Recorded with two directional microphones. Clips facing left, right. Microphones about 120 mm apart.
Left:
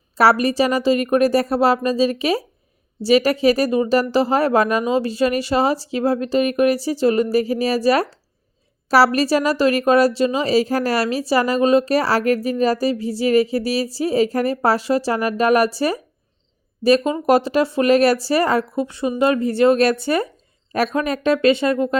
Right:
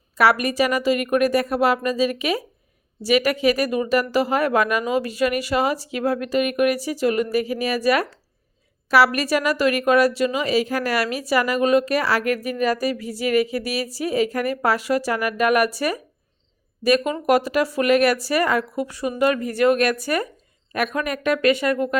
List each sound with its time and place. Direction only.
0.2 s a woman's voice: 30° left (ahead or behind)